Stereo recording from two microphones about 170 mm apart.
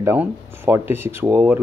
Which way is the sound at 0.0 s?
15° right (ahead or behind).